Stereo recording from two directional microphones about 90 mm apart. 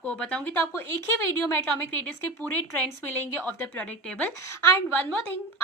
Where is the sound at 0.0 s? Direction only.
10° left (ahead or behind).